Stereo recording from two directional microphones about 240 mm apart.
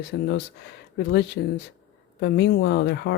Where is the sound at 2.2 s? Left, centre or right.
Left.